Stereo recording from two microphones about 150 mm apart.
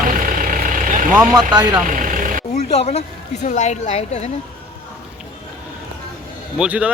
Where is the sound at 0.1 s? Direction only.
65° right (ahead or behind).